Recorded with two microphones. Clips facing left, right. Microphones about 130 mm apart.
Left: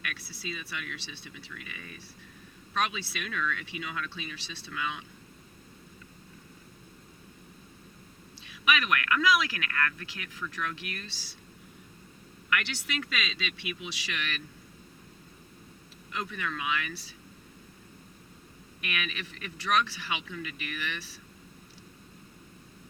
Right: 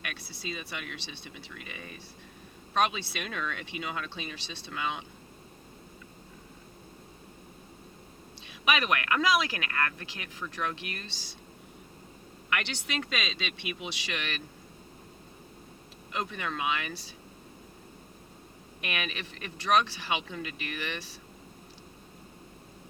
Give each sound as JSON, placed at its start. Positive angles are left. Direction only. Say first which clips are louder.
{"t": 0.0, "sound": "a sound", "louder": "even", "side_deg": -40}
{"t": 1.6, "sound": "speech", "louder": "right 2 dB", "side_deg": -35}
{"t": 8.6, "sound": "speech", "louder": "even", "side_deg": -35}
{"t": 12.5, "sound": "speech", "louder": "left 1 dB", "side_deg": -30}
{"t": 16.1, "sound": "speech", "louder": "right 2 dB", "side_deg": -30}
{"t": 18.8, "sound": "speech", "louder": "right 1 dB", "side_deg": -35}